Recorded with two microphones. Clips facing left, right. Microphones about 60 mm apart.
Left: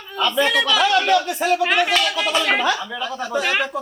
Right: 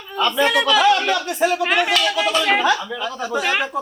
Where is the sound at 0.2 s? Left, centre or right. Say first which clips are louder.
Right 1 dB; centre.